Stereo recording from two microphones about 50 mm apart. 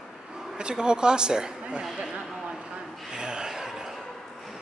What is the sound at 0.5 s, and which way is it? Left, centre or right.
A man's voice, centre.